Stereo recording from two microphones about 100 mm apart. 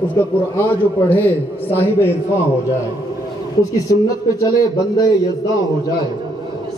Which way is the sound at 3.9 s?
35° left (ahead or behind).